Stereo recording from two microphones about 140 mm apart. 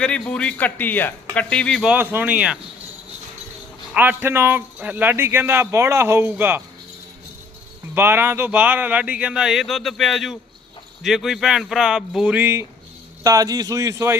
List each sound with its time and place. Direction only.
0.0 s a man's voice: 10° left (ahead or behind)
1.8 s speech: 10° right (ahead or behind)
3.9 s speech: 10° right (ahead or behind)
7.9 s speech: 15° right (ahead or behind)
13.2 s speech: 25° right (ahead or behind)